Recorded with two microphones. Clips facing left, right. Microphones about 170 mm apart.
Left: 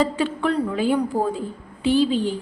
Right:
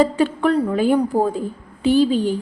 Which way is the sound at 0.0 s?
45° right (ahead or behind).